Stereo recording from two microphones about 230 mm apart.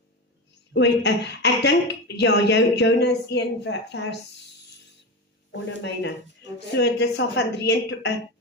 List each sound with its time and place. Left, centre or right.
0.7 s a woman's voice: left
5.5 s a woman's voice: left